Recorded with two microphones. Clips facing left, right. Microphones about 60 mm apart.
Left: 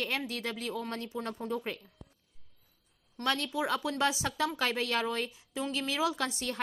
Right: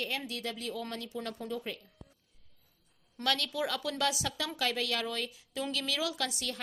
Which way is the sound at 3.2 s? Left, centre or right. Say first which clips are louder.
Left 1 dB; left.